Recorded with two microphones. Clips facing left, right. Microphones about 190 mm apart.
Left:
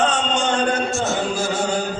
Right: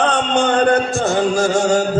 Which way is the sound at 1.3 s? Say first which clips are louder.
Right 7 dB; 45° right (ahead or behind).